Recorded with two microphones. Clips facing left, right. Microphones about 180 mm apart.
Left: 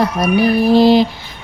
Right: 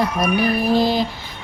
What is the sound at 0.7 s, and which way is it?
Music, 75° left (ahead or behind).